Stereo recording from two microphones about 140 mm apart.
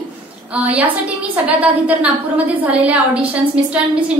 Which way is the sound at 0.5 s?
10° right (ahead or behind).